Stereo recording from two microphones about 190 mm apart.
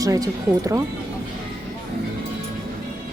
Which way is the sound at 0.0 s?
15° right (ahead or behind).